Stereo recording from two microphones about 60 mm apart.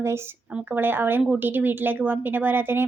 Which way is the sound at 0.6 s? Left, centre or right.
Right.